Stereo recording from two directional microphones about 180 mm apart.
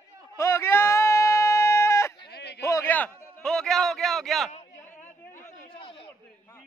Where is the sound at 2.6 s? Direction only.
15° left (ahead or behind); by 4.5 s centre (ahead or behind).